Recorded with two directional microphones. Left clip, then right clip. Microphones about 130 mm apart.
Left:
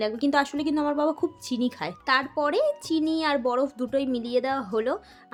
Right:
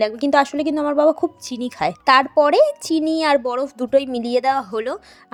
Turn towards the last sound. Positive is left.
turn(degrees=-55)  # may be behind; listen again after turning